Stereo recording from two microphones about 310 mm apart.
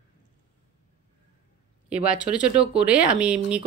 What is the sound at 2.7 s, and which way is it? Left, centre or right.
Speech, centre.